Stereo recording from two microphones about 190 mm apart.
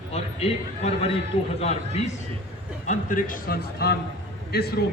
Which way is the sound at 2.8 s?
45° left (ahead or behind).